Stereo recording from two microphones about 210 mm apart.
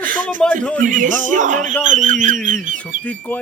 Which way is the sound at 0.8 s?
40° right (ahead or behind).